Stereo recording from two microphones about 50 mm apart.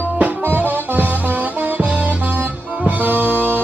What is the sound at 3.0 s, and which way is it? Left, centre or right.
Music, right.